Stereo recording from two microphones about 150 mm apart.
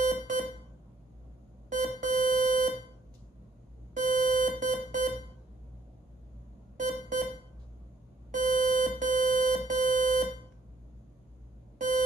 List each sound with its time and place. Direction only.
0.0 s smoke detector: 60° right (ahead or behind)
1.7 s alarm clock: 60° right (ahead or behind)
3.9 s alarm: 60° right (ahead or behind)
6.8 s smoke detector: 60° right (ahead or behind)
8.3 s beep: 60° right (ahead or behind)